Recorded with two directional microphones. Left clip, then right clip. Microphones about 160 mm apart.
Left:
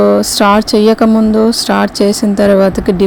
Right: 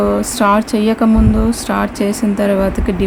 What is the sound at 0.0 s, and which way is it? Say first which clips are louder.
Speech: left 5 dB; 35° left (ahead or behind).